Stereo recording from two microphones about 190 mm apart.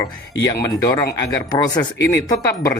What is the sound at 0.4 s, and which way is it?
Speech, 20° left (ahead or behind).